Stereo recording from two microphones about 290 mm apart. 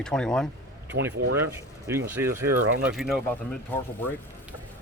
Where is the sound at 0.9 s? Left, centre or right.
Right.